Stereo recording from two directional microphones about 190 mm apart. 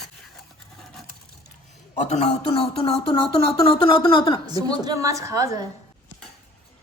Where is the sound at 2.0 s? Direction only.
35° left (ahead or behind).